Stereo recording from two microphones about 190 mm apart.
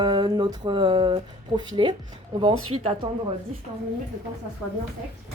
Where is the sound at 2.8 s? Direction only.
30° right (ahead or behind).